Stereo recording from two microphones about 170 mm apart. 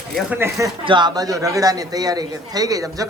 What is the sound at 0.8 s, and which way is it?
A man's voice, 25° right (ahead or behind).